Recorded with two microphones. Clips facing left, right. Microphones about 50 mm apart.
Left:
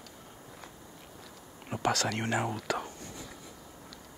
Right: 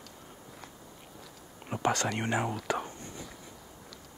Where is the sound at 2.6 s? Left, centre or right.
Centre.